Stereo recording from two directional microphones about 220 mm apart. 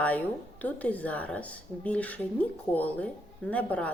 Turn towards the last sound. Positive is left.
turn(degrees=5)  # may be behind; listen again after turning